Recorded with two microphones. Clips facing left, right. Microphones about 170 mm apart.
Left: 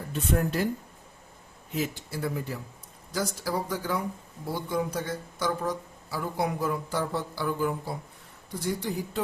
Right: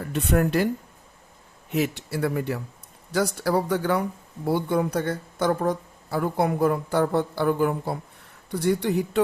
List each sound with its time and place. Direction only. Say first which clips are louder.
0.0 s speech: right 5 dB; 70° right (ahead or behind)
1.7 s speech: right 6 dB; 70° right (ahead or behind)